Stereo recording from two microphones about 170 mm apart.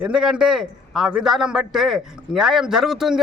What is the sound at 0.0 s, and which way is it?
A man's voice, 5° right (ahead or behind).